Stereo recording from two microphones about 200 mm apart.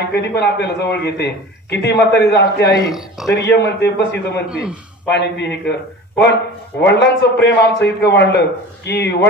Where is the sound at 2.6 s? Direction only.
15° left (ahead or behind).